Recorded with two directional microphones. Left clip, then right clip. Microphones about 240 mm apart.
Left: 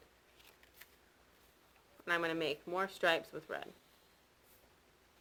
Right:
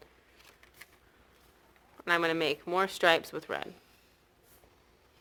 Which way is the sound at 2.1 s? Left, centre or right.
Right.